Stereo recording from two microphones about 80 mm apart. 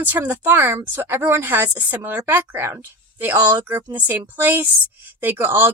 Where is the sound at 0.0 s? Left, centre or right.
Right.